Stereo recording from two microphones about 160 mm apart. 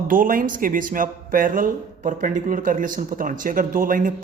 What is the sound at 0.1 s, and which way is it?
Speech, 60° right (ahead or behind).